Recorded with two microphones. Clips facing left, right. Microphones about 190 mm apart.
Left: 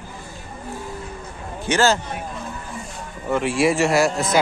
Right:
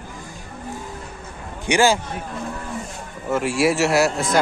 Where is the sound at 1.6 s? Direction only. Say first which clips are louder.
Right 1 dB; 15° right (ahead or behind).